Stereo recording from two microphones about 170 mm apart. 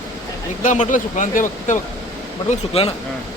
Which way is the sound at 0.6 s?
45° left (ahead or behind).